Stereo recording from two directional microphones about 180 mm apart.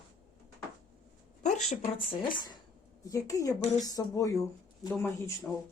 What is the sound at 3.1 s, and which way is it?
Speech, 20° left (ahead or behind).